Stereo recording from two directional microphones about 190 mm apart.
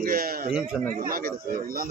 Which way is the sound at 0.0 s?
50° right (ahead or behind).